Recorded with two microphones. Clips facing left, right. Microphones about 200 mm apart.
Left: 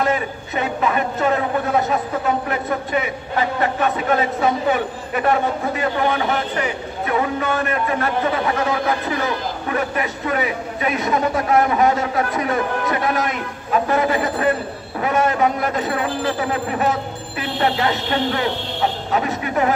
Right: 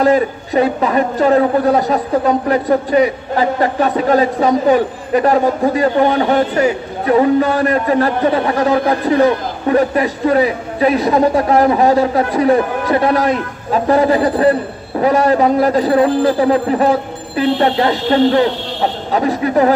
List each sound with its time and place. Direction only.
0.0 s a woman's voice: 35° right (ahead or behind)